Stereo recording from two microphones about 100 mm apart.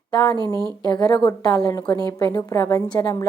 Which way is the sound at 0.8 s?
45° left (ahead or behind).